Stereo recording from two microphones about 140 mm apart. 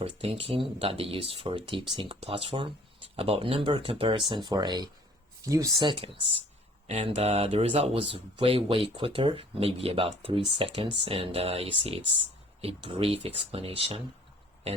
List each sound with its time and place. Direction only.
0.0 s speech: 45° right (ahead or behind)
6.8 s speech: 50° right (ahead or behind)